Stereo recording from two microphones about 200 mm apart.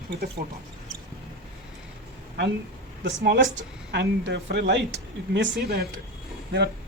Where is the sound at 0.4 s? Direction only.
45° right (ahead or behind).